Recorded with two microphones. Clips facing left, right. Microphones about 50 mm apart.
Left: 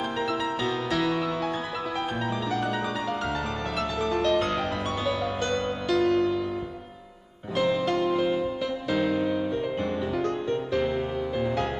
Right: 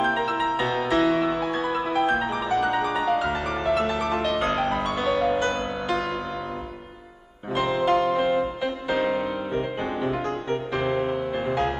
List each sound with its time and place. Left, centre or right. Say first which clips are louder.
0.4 s music: right 4 dB; right
2.7 s music: right 6 dB; right
4.2 s music: right 1 dB; right
7.5 s music: right 3 dB; right